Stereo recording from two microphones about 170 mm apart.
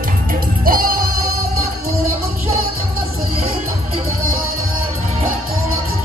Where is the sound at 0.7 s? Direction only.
60° right (ahead or behind).